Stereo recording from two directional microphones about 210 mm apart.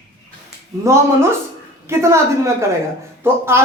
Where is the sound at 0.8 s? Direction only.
10° right (ahead or behind).